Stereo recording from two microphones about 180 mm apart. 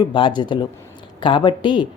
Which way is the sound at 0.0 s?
25° left (ahead or behind).